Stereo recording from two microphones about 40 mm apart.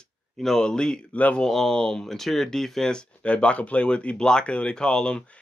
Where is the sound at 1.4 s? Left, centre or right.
Centre.